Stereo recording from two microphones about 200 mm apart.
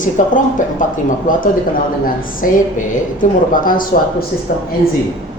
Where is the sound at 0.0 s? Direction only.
40° left (ahead or behind).